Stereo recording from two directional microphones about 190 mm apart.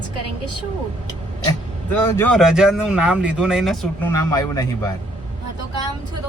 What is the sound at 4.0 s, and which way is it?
Speech, 15° left (ahead or behind).